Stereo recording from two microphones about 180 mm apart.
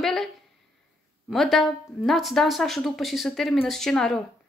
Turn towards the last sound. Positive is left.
turn(degrees=0)  # may be behind; listen again after turning